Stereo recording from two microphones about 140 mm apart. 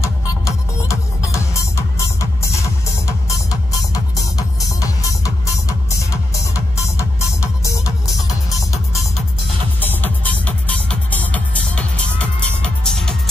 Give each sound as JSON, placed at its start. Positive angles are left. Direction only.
{"t": 0.0, "sound": "music", "side_deg": 20}
{"t": 9.8, "sound": "music", "side_deg": 15}